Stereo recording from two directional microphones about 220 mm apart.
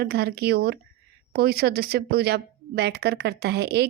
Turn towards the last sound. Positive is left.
turn(degrees=-50)  # may be behind; listen again after turning